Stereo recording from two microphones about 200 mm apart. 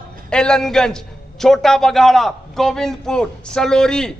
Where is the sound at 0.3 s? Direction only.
5° left (ahead or behind).